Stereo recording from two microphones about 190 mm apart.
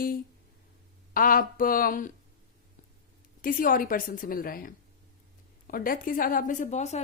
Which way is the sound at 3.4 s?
45° left (ahead or behind).